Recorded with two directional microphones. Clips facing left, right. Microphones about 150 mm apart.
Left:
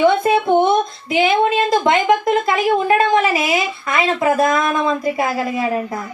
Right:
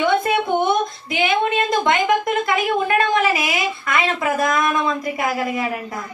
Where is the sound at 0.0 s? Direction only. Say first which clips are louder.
Left 4 dB; 30° left (ahead or behind).